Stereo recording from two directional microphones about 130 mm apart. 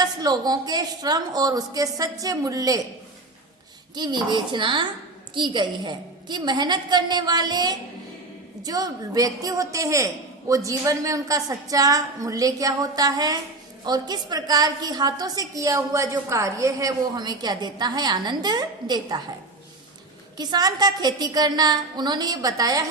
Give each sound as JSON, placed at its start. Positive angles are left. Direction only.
{"t": 0.0, "sound": "a woman's voice", "side_deg": -30}
{"t": 3.9, "sound": "a woman's voice", "side_deg": -35}
{"t": 20.3, "sound": "a woman's voice", "side_deg": -30}